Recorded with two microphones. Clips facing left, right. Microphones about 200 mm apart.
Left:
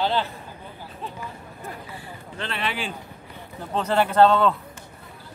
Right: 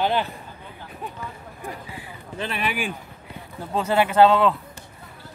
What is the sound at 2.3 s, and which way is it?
Speech, 15° right (ahead or behind).